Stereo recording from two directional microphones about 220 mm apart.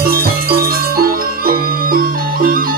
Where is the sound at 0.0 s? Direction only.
45° right (ahead or behind).